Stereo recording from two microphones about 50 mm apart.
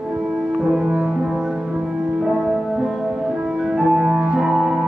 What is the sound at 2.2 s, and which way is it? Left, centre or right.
Music, centre.